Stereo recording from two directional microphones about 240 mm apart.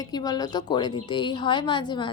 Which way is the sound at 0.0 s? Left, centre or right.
Centre.